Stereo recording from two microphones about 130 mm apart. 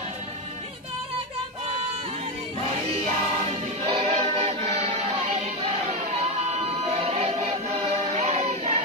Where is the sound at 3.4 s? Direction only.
50° right (ahead or behind).